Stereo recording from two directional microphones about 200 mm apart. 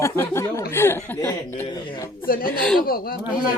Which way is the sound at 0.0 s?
15° left (ahead or behind).